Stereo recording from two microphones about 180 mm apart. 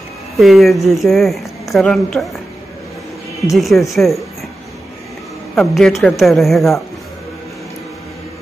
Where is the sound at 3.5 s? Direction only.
Centre (ahead or behind).